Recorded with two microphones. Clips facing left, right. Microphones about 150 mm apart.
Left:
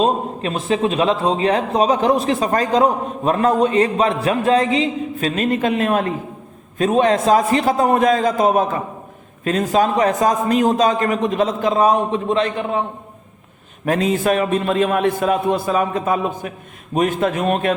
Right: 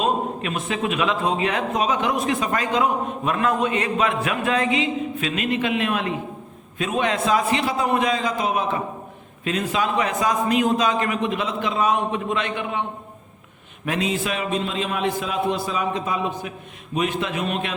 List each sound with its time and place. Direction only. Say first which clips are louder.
0.0 s a man's voice: left 4 dB; 30° left (ahead or behind)
13.8 s a man's voice: left 7 dB; 45° left (ahead or behind)